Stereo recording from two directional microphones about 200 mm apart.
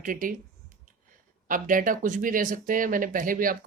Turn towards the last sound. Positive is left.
turn(degrees=-45)  # may be behind; listen again after turning